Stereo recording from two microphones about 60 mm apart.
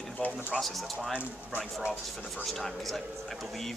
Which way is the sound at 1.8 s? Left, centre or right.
Right.